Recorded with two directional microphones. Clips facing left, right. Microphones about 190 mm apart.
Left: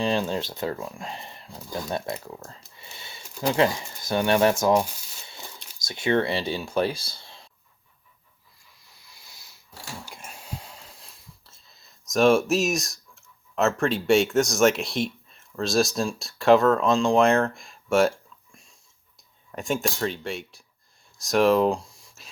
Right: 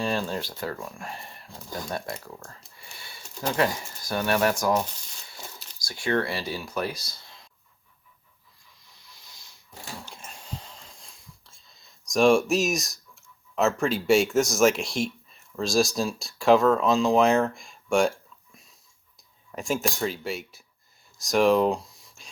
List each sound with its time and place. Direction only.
0.0 s speech: 20° left (ahead or behind)
2.7 s a sound: 20° left (ahead or behind)
3.6 s speech: 25° left (ahead or behind)
5.8 s speech: 20° left (ahead or behind)
9.0 s a sound: 10° left (ahead or behind)
10.1 s wheeze: 10° left (ahead or behind)
13.6 s speech: centre (ahead or behind)
19.5 s speech: centre (ahead or behind)
21.2 s a sound: centre (ahead or behind)